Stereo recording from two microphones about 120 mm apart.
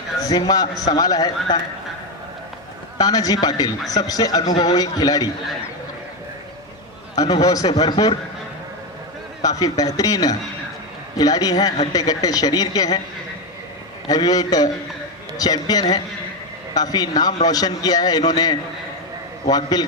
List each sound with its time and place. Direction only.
0.2 s a man's voice: 30° left (ahead or behind)
3.0 s a man's voice: 30° left (ahead or behind)
7.2 s a man's voice: 30° left (ahead or behind)
9.4 s a man's voice: 30° left (ahead or behind)
14.0 s a man's voice: 35° left (ahead or behind)